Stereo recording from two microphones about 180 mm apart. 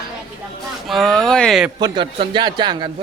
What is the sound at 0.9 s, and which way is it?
Speech, centre (ahead or behind).